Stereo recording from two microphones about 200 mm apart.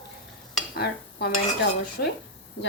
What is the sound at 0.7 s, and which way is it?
Speech, 55° left (ahead or behind).